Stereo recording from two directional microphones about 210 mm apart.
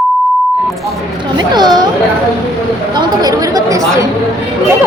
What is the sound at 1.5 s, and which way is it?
Children playing, 20° right (ahead or behind).